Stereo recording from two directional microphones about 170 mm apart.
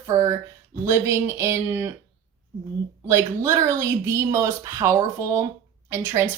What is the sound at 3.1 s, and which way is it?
A woman's voice, 15° right (ahead or behind).